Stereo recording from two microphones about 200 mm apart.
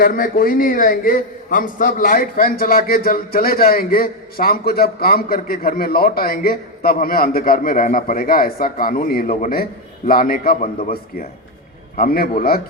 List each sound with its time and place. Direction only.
0.0 s a man's voice: 45° left (ahead or behind)